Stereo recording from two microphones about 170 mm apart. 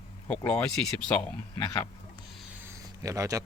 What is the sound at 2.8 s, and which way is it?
Speech, 20° right (ahead or behind).